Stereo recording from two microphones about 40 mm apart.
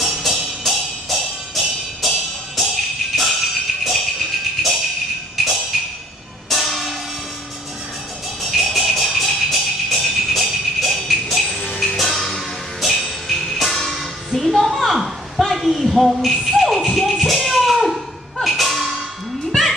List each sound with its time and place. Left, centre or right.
0.0 s music: centre
5.4 s music: centre
8.4 s music: centre
11.6 s music: left
12.0 s music: centre